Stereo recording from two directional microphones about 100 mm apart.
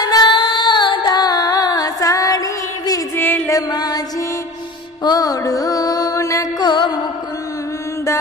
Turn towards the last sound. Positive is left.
turn(degrees=50)  # may be behind; listen again after turning